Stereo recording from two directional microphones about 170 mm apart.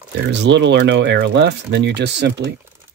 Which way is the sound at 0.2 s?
90° right.